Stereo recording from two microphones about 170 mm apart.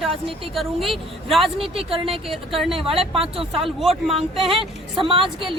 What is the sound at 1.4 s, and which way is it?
A woman's voice, 30° right (ahead or behind).